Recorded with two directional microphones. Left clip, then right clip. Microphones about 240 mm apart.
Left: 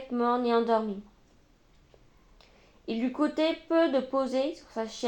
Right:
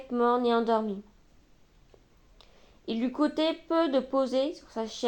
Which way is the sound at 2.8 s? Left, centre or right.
Right.